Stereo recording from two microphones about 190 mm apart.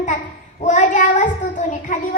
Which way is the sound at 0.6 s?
40° left (ahead or behind).